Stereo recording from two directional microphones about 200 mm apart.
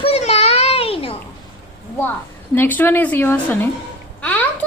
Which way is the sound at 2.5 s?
10° left (ahead or behind).